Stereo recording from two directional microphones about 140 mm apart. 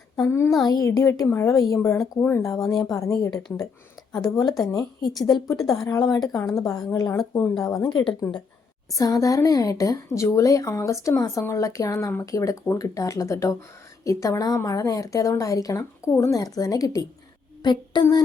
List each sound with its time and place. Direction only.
0.3 s a woman's voice: 20° left (ahead or behind)